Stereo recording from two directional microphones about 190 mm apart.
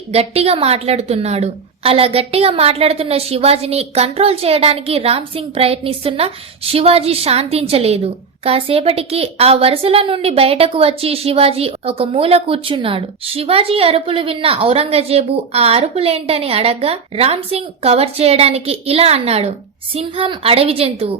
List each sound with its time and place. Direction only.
0.1 s a woman's voice: 30° right (ahead or behind)